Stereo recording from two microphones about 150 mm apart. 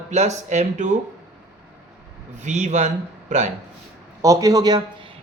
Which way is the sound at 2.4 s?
50° right (ahead or behind).